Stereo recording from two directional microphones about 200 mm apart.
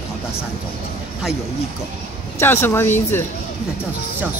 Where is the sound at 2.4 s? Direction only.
10° left (ahead or behind).